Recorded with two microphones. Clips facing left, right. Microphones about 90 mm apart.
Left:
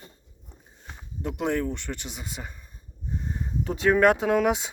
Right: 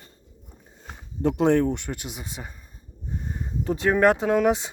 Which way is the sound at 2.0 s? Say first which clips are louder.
Right 1 dB; 5° right (ahead or behind).